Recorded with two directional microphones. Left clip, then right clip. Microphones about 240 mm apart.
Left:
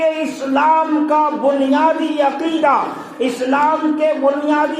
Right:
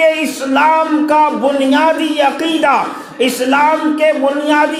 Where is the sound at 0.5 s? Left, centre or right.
Right.